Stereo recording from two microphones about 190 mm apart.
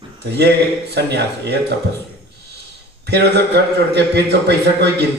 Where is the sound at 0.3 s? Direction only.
60° right (ahead or behind).